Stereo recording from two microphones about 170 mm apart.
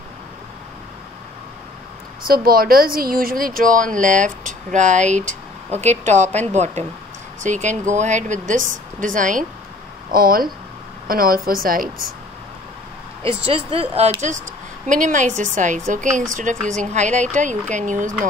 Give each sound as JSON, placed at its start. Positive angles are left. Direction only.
{"t": 2.2, "sound": "speech", "side_deg": -60}
{"t": 13.3, "sound": "speech", "side_deg": -35}
{"t": 14.9, "sound": "speech", "side_deg": -50}
{"t": 16.5, "sound": "a woman's voice", "side_deg": 5}
{"t": 16.9, "sound": "speech", "side_deg": -45}